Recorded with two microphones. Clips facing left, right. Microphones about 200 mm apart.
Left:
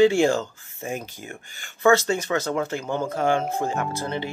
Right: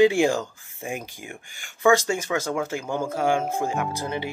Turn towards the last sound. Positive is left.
turn(degrees=-10)  # may be behind; listen again after turning